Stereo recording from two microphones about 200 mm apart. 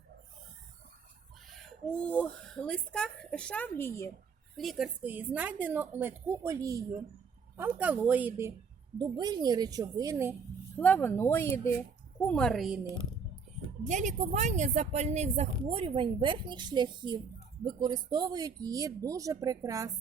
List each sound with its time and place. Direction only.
1.5 s speech: 5° left (ahead or behind)
4.5 s a woman's voice: centre (ahead or behind)
9.0 s speech: 20° right (ahead or behind)
10.8 s speech: 10° left (ahead or behind)
13.8 s a woman's voice: 40° right (ahead or behind); by 19.9 s 15° right (ahead or behind)